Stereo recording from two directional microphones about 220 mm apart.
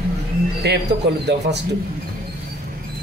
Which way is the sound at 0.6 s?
50° right (ahead or behind).